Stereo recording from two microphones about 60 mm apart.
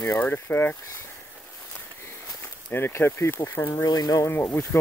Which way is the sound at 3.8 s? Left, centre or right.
Left.